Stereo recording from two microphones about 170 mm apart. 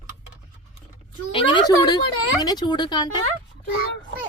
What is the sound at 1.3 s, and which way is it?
Speech, 30° left (ahead or behind).